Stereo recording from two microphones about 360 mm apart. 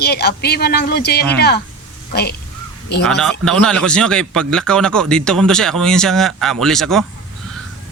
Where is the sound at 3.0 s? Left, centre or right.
Centre.